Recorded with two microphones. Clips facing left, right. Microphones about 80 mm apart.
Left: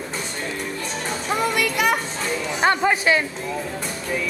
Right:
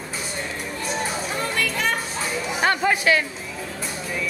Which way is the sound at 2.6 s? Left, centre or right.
Centre.